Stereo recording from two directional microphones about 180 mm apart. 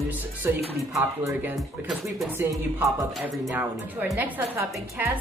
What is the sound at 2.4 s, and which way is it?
Speech, 15° right (ahead or behind).